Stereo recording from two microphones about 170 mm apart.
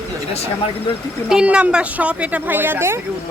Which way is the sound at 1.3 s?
5° right (ahead or behind).